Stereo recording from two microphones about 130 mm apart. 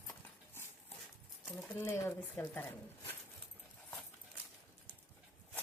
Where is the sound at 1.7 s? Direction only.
20° left (ahead or behind).